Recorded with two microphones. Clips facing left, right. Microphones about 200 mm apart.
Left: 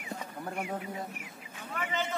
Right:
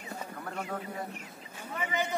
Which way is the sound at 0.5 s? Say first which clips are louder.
Left 2 dB; 15° left (ahead or behind).